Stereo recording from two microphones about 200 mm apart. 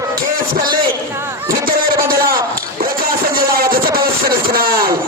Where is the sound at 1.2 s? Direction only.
15° right (ahead or behind).